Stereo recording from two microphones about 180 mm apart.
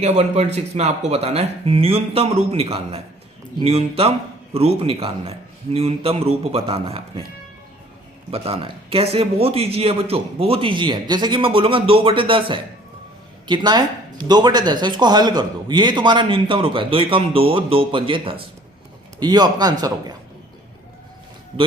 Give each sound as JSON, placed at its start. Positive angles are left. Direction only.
{"t": 0.0, "sound": "speech", "side_deg": -35}
{"t": 8.3, "sound": "speech", "side_deg": -30}